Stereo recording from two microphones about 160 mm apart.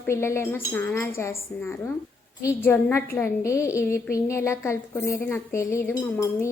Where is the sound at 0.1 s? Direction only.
15° left (ahead or behind).